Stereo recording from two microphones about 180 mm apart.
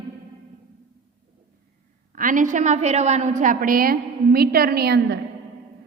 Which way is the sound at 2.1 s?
45° right (ahead or behind).